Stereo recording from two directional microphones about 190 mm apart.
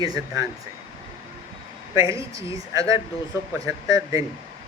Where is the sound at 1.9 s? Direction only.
15° right (ahead or behind).